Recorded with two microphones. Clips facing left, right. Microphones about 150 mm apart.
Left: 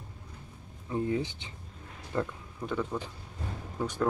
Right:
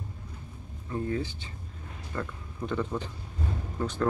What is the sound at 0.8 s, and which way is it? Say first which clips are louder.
Speech: left 1 dB; 15° left (ahead or behind).